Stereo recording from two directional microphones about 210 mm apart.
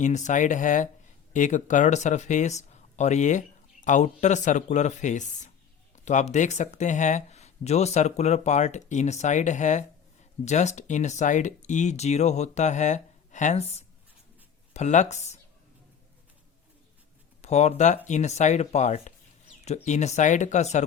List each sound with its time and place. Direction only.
0.0 s speech: 35° left (ahead or behind)
17.4 s speech: 30° left (ahead or behind)